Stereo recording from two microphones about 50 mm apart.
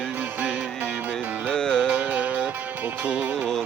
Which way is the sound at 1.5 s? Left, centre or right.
Centre.